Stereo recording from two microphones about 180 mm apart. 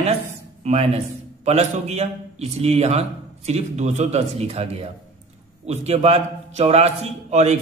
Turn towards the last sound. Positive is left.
turn(degrees=-40)  # may be behind; listen again after turning